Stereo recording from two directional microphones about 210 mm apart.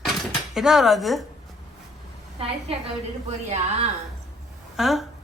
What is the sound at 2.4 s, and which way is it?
A woman's voice, 30° right (ahead or behind).